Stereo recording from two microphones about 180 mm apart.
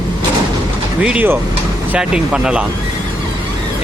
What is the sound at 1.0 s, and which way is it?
Speech, 5° right (ahead or behind).